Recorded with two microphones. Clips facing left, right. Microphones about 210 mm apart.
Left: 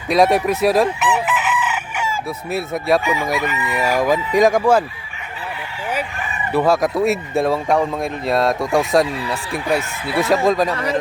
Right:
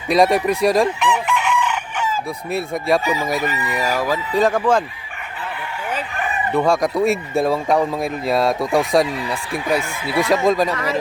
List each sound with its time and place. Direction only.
0.1 s chicken: centre (ahead or behind)
3.4 s crowing: 35° right (ahead or behind)
3.8 s speech: 15° left (ahead or behind)
6.5 s speech: 5° left (ahead or behind)